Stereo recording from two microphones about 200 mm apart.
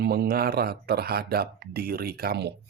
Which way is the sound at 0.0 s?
50° right (ahead or behind).